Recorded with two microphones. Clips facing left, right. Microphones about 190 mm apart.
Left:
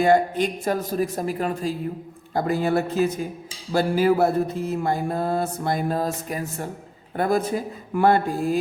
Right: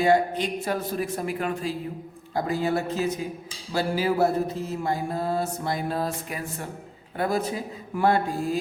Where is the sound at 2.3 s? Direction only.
55° left (ahead or behind).